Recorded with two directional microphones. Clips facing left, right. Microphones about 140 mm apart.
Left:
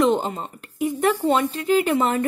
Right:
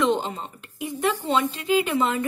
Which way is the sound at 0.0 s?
45° left (ahead or behind).